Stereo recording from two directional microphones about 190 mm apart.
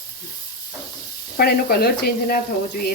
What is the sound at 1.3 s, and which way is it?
Speech, 55° left (ahead or behind).